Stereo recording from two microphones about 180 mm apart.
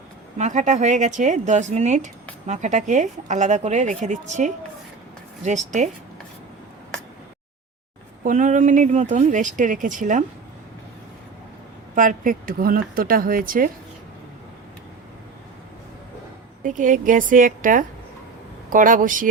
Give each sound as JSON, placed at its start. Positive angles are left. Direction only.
{"t": 0.3, "sound": "speech", "side_deg": -45}
{"t": 8.2, "sound": "speech", "side_deg": -45}
{"t": 11.9, "sound": "speech", "side_deg": -50}
{"t": 16.6, "sound": "speech", "side_deg": -45}